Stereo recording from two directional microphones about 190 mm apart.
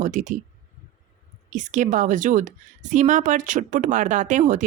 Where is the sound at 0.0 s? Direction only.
40° right (ahead or behind).